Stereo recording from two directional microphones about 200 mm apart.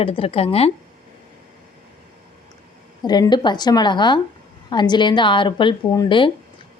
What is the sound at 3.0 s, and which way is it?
A woman's voice, 20° left (ahead or behind).